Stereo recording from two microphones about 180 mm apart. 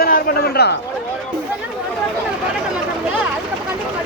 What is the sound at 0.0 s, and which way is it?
Speech, 60° left (ahead or behind).